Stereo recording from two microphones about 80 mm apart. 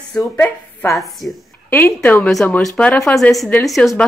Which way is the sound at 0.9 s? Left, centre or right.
Centre.